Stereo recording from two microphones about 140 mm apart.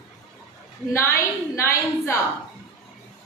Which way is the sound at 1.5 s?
20° left (ahead or behind).